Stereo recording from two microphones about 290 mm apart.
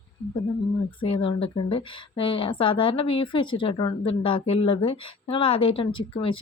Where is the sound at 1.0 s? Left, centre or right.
Centre.